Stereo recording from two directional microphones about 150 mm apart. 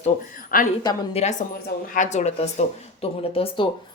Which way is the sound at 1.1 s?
45° left (ahead or behind).